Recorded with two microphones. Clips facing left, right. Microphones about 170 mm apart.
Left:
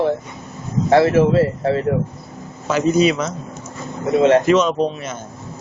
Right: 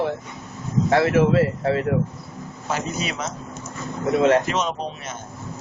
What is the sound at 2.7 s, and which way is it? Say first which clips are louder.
Speech: left 12 dB; 90° left.